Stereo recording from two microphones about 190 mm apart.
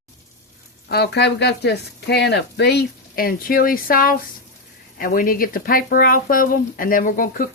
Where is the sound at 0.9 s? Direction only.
60° left (ahead or behind).